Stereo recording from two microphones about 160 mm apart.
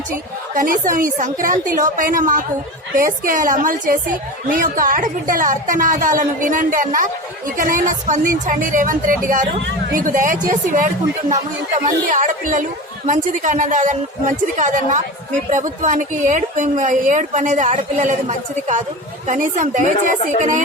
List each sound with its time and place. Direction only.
0.5 s a woman's voice: 60° right (ahead or behind)